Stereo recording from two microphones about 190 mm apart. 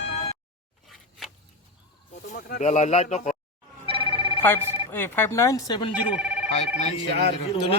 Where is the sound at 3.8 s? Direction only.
30° right (ahead or behind).